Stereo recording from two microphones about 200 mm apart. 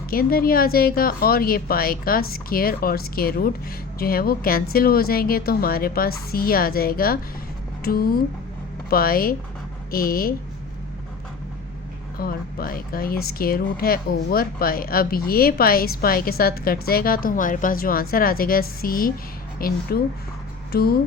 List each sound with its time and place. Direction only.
0.1 s a woman's voice: 50° left (ahead or behind)
12.2 s a woman's voice: 45° left (ahead or behind)